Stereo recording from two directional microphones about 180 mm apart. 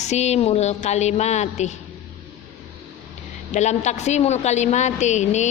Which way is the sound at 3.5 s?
40° left (ahead or behind).